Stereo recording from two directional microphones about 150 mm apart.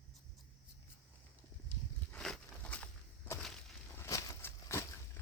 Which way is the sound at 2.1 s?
5° left (ahead or behind).